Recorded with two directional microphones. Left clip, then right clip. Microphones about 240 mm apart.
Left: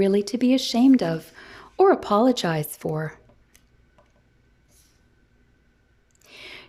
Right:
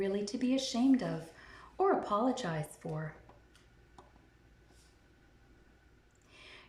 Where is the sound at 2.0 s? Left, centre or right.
Left.